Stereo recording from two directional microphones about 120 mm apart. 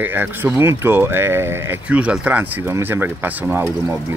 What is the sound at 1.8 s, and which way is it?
Speech, 10° right (ahead or behind).